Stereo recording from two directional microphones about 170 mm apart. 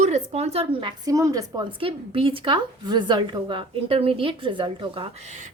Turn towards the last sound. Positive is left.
turn(degrees=-30)  # may be behind; listen again after turning